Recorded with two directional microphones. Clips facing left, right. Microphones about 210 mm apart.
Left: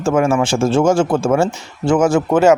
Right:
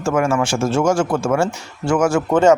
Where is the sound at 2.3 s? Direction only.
10° left (ahead or behind).